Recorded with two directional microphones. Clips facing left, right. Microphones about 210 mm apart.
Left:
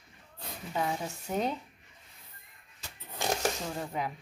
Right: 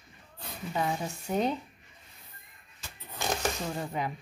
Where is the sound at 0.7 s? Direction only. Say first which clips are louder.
Right 1 dB; centre (ahead or behind).